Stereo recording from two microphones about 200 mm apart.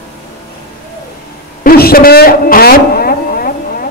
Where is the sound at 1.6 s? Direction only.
50° left (ahead or behind).